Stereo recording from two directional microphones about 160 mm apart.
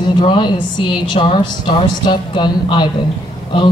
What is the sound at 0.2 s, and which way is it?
A woman's voice, 30° left (ahead or behind).